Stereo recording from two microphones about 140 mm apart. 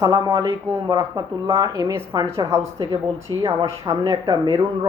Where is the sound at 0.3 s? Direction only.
20° right (ahead or behind).